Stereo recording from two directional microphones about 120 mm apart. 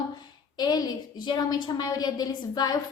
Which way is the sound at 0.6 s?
35° left (ahead or behind).